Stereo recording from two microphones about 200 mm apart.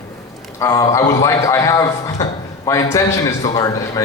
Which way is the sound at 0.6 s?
15° left (ahead or behind).